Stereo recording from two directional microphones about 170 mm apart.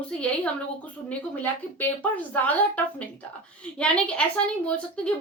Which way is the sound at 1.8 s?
10° left (ahead or behind).